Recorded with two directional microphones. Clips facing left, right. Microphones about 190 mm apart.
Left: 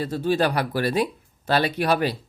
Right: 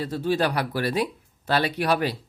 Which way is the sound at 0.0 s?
45° left (ahead or behind).